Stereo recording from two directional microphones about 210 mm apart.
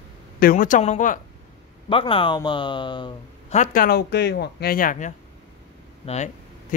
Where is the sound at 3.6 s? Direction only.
40° left (ahead or behind).